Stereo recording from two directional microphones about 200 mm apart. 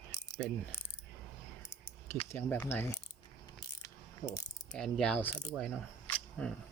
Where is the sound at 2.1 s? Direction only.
10° left (ahead or behind).